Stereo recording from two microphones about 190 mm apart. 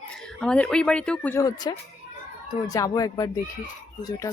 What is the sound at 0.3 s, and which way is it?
Speech, 5° left (ahead or behind).